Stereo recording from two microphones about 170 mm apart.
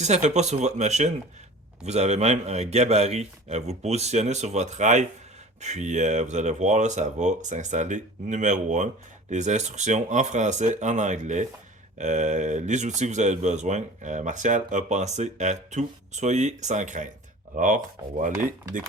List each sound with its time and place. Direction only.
0.0 s speech: 45° right (ahead or behind)